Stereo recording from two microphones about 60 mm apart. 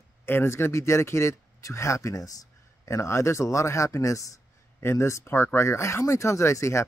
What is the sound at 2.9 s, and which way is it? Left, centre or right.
Speech, left.